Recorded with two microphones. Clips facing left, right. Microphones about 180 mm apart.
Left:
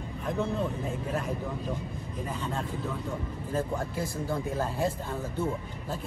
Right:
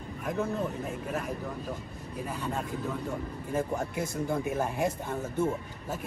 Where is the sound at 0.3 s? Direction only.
5° right (ahead or behind).